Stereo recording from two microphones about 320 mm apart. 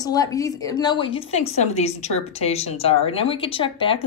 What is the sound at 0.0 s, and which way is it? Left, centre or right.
A woman's voice, centre.